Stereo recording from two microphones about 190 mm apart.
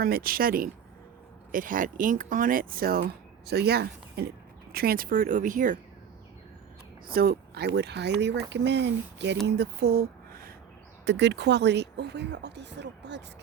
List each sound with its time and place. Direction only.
0.0 s speech: 50° right (ahead or behind)
7.1 s speech: 50° right (ahead or behind)
11.0 s speech: 65° right (ahead or behind)